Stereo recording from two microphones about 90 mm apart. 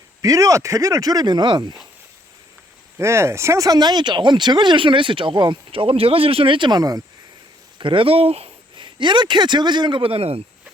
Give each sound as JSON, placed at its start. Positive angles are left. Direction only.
{"t": 0.2, "sound": "speech", "side_deg": -40}
{"t": 3.0, "sound": "speech", "side_deg": -30}
{"t": 5.7, "sound": "speech", "side_deg": -90}
{"t": 7.8, "sound": "speech", "side_deg": -70}